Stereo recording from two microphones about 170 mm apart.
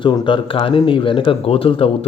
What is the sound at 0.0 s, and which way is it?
Speech, 30° left (ahead or behind).